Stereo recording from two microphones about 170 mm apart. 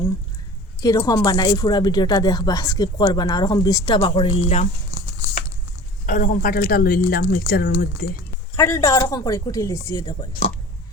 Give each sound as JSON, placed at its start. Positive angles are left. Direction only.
{"t": 0.8, "sound": "speech", "side_deg": 20}
{"t": 6.1, "sound": "speech", "side_deg": 50}
{"t": 8.5, "sound": "speech", "side_deg": 20}